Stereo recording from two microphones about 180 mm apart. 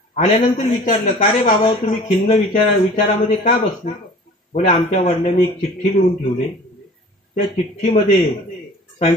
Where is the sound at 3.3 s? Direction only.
45° left (ahead or behind).